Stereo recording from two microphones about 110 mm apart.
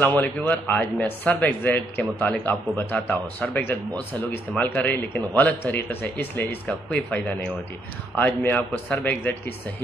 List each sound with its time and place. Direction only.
0.0 s speech: 15° left (ahead or behind)